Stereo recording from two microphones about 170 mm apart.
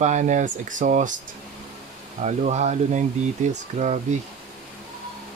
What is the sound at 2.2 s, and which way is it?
Speech, 40° right (ahead or behind).